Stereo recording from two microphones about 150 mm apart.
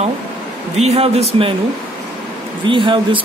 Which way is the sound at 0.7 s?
45° right (ahead or behind).